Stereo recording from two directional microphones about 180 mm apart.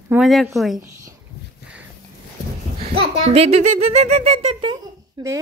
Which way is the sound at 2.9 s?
35° right (ahead or behind).